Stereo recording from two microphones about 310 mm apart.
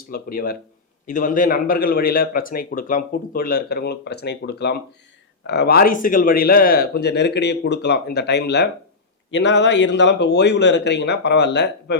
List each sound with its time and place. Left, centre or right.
0.1 s a man's voice: left